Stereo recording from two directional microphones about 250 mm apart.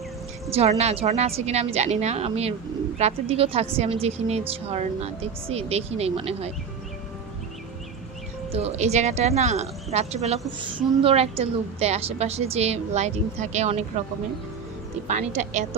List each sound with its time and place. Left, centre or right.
0.5 s a woman's voice: right
8.5 s a woman's voice: right
15.0 s a woman's voice: right